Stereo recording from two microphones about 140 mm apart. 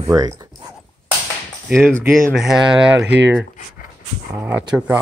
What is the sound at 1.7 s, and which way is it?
Speech, 5° left (ahead or behind).